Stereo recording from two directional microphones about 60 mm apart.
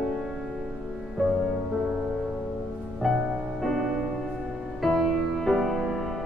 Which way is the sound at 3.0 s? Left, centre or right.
Centre.